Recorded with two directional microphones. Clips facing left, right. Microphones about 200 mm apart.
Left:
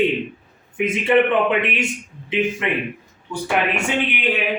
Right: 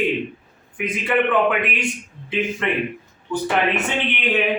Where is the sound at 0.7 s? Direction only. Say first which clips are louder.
Left 4 dB; 25° left (ahead or behind).